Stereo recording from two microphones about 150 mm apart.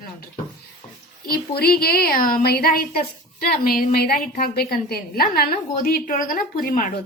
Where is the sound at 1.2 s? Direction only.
90° left.